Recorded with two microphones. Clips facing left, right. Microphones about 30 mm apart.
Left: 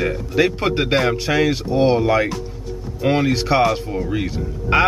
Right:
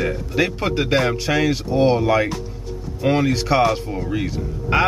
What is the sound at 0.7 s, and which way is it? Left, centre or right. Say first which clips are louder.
Speech: left 1 dB; centre.